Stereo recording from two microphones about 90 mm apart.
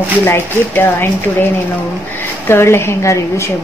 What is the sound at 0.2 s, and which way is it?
Speech, 25° left (ahead or behind).